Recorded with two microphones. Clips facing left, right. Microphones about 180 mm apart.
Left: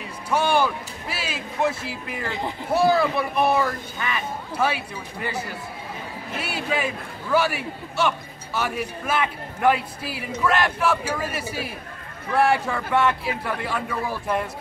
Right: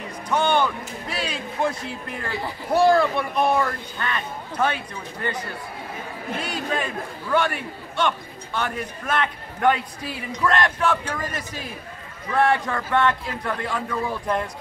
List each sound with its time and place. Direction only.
0.3 s speech: 10° left (ahead or behind)
2.2 s speech: 20° left (ahead or behind)
2.7 s a man's voice: 5° left (ahead or behind)